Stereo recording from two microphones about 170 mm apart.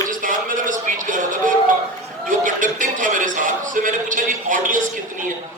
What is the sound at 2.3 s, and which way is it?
A man's voice, 50° right (ahead or behind).